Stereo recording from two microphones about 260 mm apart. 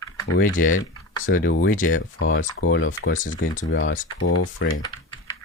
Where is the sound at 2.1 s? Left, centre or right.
Left.